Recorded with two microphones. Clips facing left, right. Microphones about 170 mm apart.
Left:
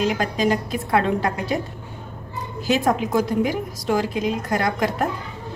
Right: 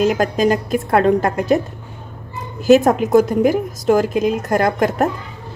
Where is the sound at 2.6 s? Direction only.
45° right (ahead or behind).